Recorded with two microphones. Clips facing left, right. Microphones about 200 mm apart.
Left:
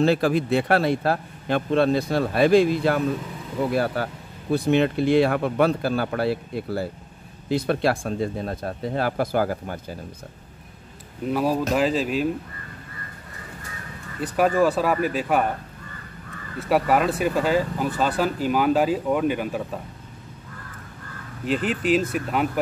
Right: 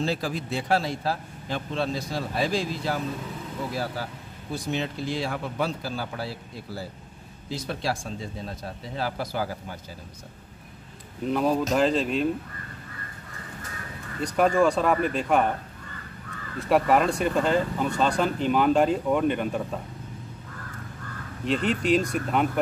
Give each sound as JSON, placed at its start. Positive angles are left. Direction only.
{"t": 0.0, "sound": "speech", "side_deg": 60}
{"t": 11.2, "sound": "speech", "side_deg": 5}
{"t": 14.2, "sound": "speech", "side_deg": 5}
{"t": 16.5, "sound": "speech", "side_deg": 5}
{"t": 21.5, "sound": "speech", "side_deg": 5}